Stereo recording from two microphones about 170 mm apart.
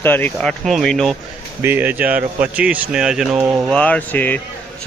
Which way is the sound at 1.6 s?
10° right (ahead or behind).